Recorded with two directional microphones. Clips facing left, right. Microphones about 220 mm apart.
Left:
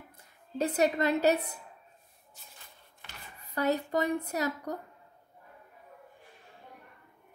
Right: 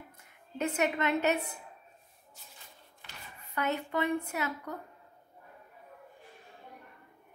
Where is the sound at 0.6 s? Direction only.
35° left (ahead or behind).